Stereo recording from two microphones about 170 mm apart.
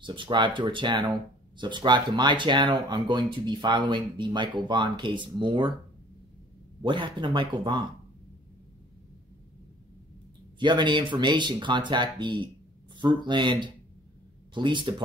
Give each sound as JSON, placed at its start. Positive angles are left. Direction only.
{"t": 0.0, "sound": "speech", "side_deg": -30}
{"t": 6.8, "sound": "speech", "side_deg": -30}
{"t": 10.6, "sound": "speech", "side_deg": -25}